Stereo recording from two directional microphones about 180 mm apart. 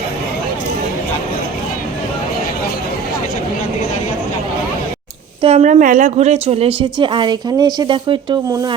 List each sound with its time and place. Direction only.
5.4 s speech: 35° right (ahead or behind)